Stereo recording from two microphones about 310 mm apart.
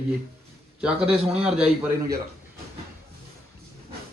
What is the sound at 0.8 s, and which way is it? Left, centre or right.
Speech, centre.